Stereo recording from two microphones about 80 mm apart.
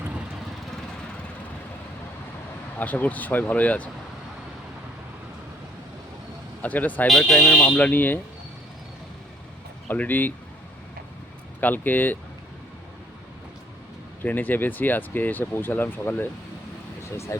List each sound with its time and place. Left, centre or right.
2.7 s speech: left
6.6 s speech: centre
7.1 s speech: centre; by 8.2 s left
9.9 s speech: left
11.6 s speech: left
14.2 s speech: left